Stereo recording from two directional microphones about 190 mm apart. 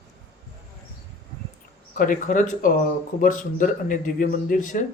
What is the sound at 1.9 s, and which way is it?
A man's voice, 45° left (ahead or behind).